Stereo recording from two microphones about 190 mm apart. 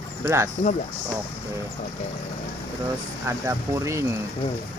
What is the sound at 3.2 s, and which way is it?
Speech, 15° right (ahead or behind).